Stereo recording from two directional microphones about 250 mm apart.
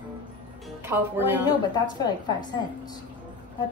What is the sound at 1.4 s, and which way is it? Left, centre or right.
Speech, centre.